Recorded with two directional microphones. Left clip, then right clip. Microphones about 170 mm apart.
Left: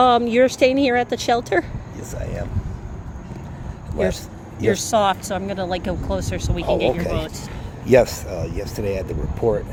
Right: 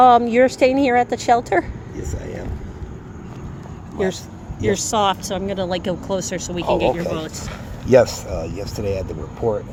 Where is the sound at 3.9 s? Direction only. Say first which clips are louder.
Left 1 dB; 5° right (ahead or behind).